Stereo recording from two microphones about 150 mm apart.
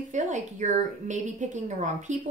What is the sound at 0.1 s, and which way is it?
A woman's voice, 55° right (ahead or behind).